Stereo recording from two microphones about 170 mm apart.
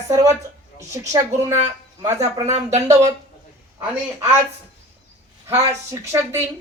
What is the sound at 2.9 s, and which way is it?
A woman's voice, 20° right (ahead or behind).